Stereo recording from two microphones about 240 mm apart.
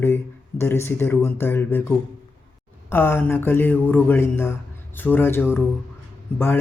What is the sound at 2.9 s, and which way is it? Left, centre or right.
Speech, centre.